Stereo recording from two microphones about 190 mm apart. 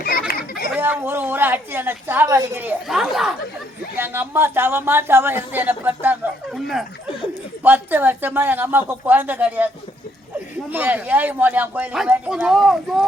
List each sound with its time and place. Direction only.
0.0 s a sound: 50° left (ahead or behind)
0.8 s speech: 10° right (ahead or behind)
10.7 s speech: 10° right (ahead or behind)